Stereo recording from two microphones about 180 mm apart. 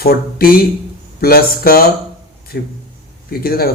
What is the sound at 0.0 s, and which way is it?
Speech, 55° left (ahead or behind).